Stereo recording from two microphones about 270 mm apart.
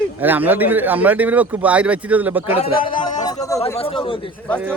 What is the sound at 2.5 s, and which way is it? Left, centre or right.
A man's voice, centre.